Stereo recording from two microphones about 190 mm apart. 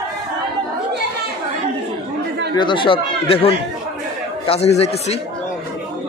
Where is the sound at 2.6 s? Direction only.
25° left (ahead or behind).